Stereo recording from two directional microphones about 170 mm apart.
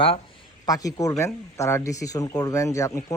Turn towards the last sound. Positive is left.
turn(degrees=20)  # may be behind; listen again after turning